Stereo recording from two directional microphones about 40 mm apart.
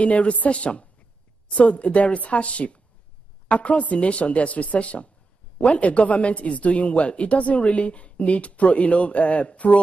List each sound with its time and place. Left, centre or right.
0.0 s speech: left